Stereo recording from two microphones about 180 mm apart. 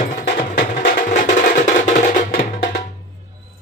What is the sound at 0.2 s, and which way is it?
Music, 50° left (ahead or behind).